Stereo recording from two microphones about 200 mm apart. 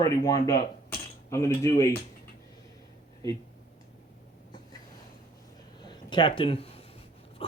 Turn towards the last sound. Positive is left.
turn(degrees=30)  # may be behind; listen again after turning